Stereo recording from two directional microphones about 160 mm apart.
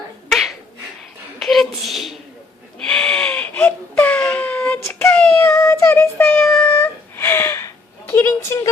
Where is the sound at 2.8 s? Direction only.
5° left (ahead or behind).